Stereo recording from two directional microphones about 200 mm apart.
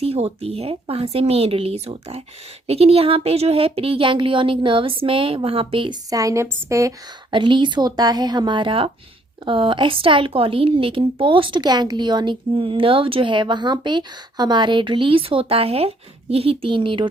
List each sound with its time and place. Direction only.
0.0 s a woman's voice: 30° right (ahead or behind)